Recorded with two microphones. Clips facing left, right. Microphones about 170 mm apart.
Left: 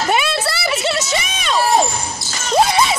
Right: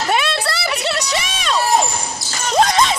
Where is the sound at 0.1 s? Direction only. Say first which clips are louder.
Even; 5° left (ahead or behind).